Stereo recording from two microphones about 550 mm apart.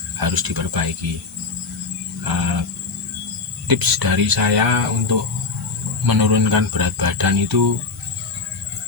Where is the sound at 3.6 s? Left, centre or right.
Right.